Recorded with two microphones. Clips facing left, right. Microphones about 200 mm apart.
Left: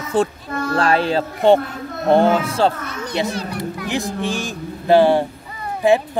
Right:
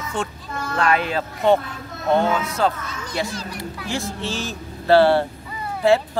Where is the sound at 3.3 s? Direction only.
60° left (ahead or behind).